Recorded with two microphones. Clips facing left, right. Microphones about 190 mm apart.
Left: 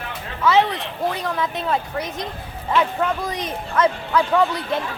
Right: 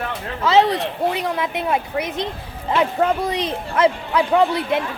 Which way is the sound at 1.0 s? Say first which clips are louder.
Even; 20° right (ahead or behind).